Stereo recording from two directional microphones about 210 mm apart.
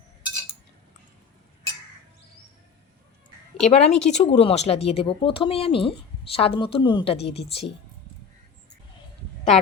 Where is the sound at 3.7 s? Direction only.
30° left (ahead or behind).